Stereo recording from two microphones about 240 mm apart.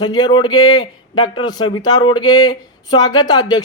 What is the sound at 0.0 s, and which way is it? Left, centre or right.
Speech, centre.